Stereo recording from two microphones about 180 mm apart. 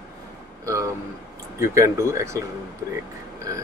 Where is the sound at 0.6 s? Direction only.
15° right (ahead or behind).